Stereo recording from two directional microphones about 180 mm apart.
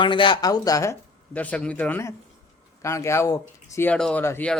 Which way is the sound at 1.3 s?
10° left (ahead or behind).